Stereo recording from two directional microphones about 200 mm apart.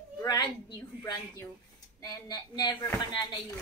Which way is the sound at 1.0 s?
15° left (ahead or behind).